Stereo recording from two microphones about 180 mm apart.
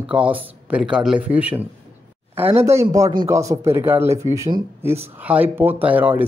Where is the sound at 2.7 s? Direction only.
15° right (ahead or behind).